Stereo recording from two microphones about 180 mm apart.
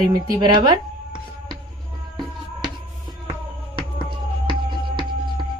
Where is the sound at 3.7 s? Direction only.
25° right (ahead or behind).